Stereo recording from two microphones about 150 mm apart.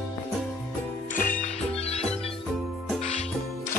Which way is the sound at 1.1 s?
65° left (ahead or behind).